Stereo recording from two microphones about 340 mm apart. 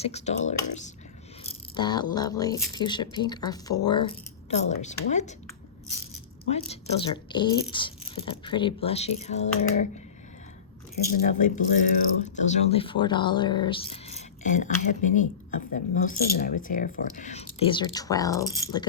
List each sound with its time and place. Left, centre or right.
0.0 s speech: centre
1.5 s a sound: centre
2.1 s speech: centre
6.4 s speech: centre
10.9 s speech: left